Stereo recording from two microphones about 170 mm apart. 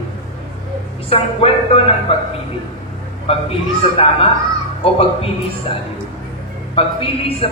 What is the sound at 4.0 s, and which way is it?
Speech, 35° left (ahead or behind).